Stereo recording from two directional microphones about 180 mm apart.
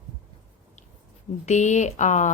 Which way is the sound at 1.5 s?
40° left (ahead or behind).